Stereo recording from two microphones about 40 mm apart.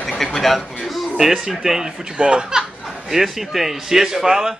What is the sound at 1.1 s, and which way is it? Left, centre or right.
Speech, centre.